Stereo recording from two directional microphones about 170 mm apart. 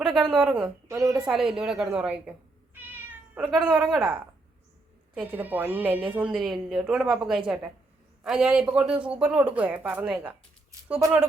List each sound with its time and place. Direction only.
0.2 s speech: 5° right (ahead or behind)
0.9 s a woman's voice: 20° right (ahead or behind)
1.3 s a woman's voice: 5° right (ahead or behind)
2.7 s cat: 10° right (ahead or behind)
3.8 s a woman's voice: 5° right (ahead or behind)